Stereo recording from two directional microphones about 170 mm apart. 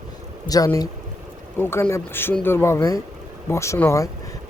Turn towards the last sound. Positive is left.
turn(degrees=15)  # may be behind; listen again after turning